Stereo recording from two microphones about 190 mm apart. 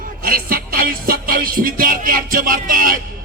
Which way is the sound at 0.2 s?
50° right (ahead or behind).